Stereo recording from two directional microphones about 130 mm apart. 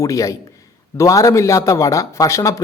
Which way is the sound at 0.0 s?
25° left (ahead or behind).